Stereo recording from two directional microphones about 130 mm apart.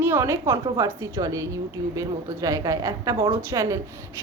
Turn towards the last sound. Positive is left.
turn(degrees=-25)  # may be behind; listen again after turning